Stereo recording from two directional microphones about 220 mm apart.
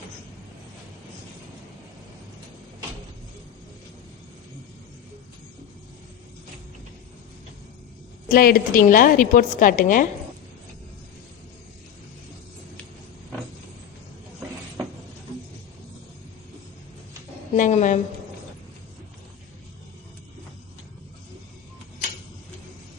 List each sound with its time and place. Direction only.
8.3 s a woman's voice: 40° left (ahead or behind)
17.5 s a woman's voice: 30° left (ahead or behind)